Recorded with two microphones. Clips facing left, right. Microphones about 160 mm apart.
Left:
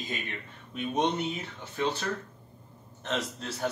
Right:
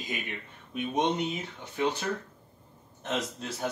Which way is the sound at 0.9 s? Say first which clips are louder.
Even; 15° right (ahead or behind).